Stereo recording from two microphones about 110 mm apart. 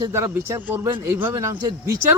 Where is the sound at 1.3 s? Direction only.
30° right (ahead or behind).